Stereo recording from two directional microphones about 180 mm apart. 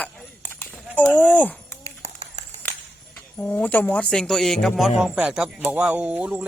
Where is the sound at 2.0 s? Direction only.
40° right (ahead or behind).